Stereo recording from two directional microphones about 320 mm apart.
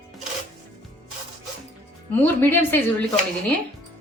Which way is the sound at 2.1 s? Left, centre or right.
Centre.